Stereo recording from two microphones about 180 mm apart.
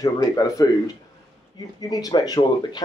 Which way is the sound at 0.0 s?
20° left (ahead or behind).